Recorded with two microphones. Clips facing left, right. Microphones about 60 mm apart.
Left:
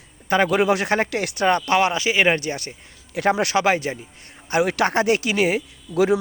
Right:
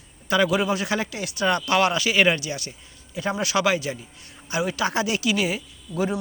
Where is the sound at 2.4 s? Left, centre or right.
Left.